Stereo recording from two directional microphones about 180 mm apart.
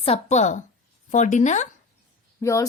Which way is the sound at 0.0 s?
35° left (ahead or behind).